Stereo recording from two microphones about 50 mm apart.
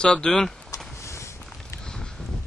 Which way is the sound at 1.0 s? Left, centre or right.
Left.